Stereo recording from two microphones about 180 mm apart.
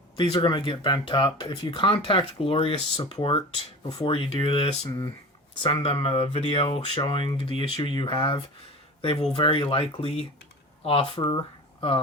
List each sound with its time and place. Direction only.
0.2 s speech: 25° left (ahead or behind)